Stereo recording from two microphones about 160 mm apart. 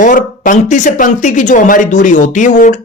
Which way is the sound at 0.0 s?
55° left (ahead or behind).